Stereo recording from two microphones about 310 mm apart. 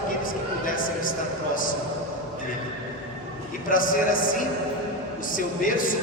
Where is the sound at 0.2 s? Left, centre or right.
Left.